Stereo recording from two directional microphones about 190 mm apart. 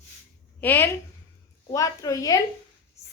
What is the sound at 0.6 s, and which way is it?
Speech, 10° left (ahead or behind).